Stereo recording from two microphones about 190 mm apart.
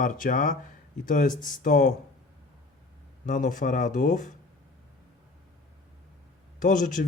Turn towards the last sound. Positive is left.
turn(degrees=45)  # may be behind; listen again after turning